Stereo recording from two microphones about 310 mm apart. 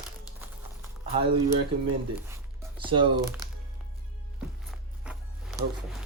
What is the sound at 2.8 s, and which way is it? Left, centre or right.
Speech, centre.